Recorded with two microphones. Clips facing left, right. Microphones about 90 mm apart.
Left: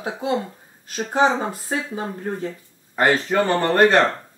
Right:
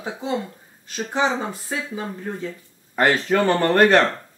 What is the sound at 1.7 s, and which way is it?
Speech, 40° left (ahead or behind).